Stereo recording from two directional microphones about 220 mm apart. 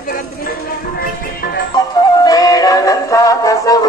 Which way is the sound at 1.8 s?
15° left (ahead or behind).